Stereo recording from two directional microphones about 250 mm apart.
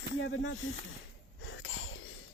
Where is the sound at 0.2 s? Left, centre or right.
Left.